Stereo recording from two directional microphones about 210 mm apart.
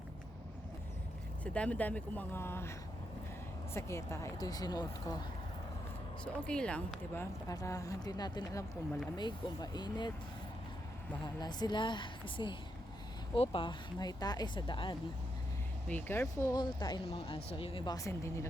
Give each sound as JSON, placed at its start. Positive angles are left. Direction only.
{"t": 1.5, "sound": "speech", "side_deg": 5}
{"t": 3.8, "sound": "speech", "side_deg": 15}
{"t": 6.2, "sound": "speech", "side_deg": 5}
{"t": 11.2, "sound": "speech", "side_deg": 20}
{"t": 15.9, "sound": "speech", "side_deg": 10}